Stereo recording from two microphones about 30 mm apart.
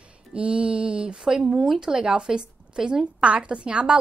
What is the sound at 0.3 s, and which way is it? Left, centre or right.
A woman's voice, right.